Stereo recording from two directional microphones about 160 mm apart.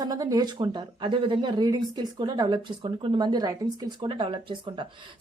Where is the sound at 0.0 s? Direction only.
20° right (ahead or behind).